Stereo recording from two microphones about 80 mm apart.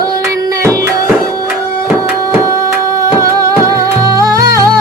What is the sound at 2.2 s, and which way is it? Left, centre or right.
Music, right.